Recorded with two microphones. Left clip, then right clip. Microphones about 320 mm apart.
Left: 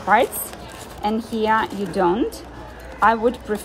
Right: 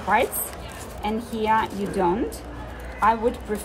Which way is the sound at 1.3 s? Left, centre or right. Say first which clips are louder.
Left 1 dB; centre.